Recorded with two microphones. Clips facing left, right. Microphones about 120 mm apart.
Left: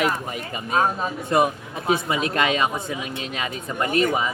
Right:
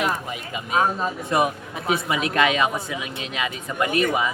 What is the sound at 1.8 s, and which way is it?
Speech, 35° left (ahead or behind).